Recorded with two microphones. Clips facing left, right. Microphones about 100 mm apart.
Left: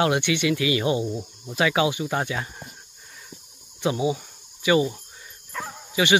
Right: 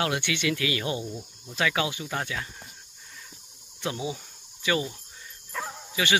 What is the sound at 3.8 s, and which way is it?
Speech, 15° left (ahead or behind).